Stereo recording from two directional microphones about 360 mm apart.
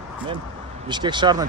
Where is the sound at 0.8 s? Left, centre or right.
Centre.